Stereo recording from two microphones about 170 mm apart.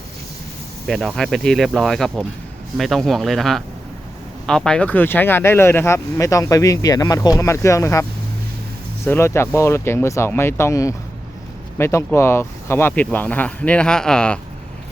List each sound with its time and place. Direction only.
0.9 s speech: centre (ahead or behind); by 8.0 s 15° left (ahead or behind)
9.0 s speech: 15° left (ahead or behind)